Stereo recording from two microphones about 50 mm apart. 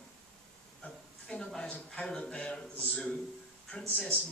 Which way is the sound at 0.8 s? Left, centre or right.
Left.